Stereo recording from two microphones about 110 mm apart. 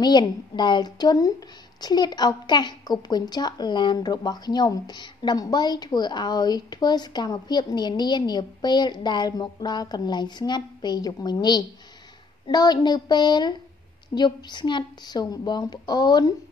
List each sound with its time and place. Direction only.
0.0 s a woman's voice: 40° left (ahead or behind)